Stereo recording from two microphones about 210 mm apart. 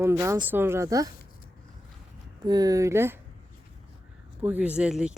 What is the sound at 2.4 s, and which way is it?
Speech, 20° right (ahead or behind).